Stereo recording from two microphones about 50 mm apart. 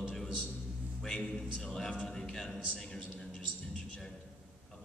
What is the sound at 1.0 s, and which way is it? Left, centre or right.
A man's voice, centre.